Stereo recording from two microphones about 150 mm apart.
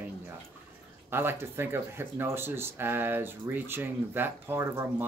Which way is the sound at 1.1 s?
15° right (ahead or behind).